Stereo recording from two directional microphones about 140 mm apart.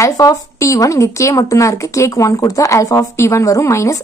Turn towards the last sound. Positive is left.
turn(degrees=20)  # may be behind; listen again after turning